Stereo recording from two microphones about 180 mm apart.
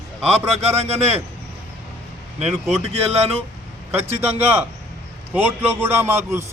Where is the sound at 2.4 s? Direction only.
35° right (ahead or behind).